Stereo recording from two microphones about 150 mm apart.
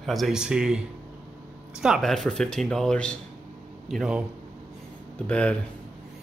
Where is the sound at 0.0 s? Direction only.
Centre (ahead or behind).